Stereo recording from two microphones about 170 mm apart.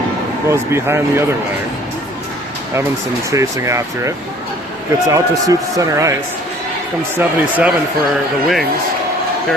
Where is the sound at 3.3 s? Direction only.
20° right (ahead or behind).